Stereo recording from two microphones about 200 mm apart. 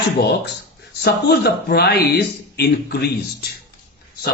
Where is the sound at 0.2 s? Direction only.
55° left (ahead or behind).